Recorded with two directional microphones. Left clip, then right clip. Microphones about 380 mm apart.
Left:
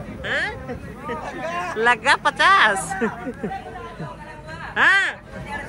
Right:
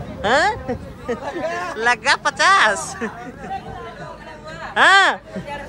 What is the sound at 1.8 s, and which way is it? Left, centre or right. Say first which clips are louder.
Speech: even; centre.